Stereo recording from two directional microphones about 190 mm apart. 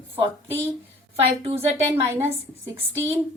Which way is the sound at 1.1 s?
30° right (ahead or behind).